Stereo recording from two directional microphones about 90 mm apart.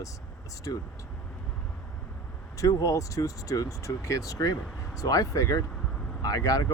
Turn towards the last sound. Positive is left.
turn(degrees=40)  # may be behind; listen again after turning